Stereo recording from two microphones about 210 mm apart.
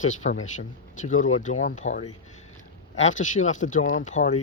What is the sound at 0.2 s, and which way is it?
Speech, 35° left (ahead or behind).